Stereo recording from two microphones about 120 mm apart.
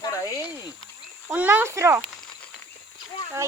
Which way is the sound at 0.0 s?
30° left (ahead or behind).